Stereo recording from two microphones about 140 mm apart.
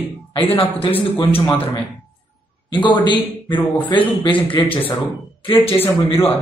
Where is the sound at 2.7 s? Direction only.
35° left (ahead or behind).